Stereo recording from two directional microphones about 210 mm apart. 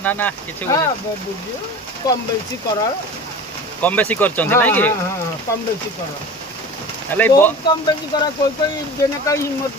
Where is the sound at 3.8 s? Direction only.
10° left (ahead or behind).